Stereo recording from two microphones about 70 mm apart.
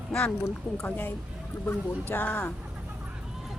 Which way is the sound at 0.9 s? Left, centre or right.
Left.